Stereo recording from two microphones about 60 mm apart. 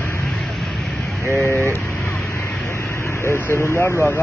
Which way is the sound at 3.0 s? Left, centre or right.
Left.